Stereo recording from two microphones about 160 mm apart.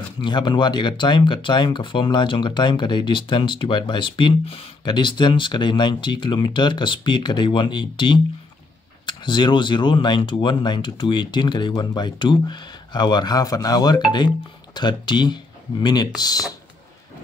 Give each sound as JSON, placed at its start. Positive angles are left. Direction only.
{"t": 0.2, "sound": "speech", "side_deg": 30}